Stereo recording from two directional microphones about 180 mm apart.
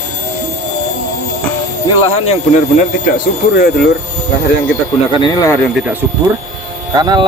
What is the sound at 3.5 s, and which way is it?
Speech, 55° left (ahead or behind).